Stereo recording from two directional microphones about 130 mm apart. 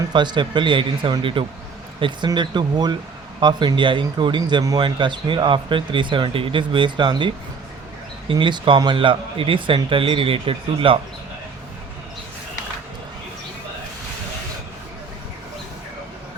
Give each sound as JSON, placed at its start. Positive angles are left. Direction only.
{"t": 0.1, "sound": "a man's voice", "side_deg": -35}